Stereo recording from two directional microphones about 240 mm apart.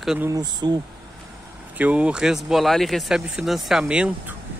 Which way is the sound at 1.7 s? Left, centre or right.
Centre.